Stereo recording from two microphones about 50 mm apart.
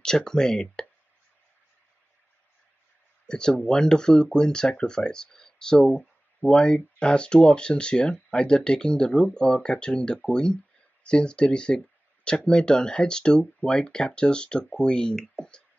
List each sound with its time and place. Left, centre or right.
0.0 s speech: centre
3.3 s speech: centre
15.1 s speech: centre